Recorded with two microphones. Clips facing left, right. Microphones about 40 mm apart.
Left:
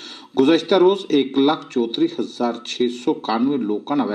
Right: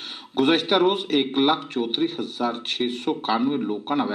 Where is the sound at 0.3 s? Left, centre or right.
Right.